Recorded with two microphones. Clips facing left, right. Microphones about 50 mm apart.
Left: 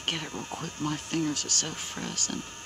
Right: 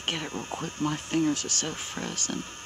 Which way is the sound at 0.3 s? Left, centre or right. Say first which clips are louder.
Right 2 dB; right.